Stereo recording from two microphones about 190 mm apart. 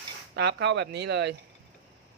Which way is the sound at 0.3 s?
65° right (ahead or behind).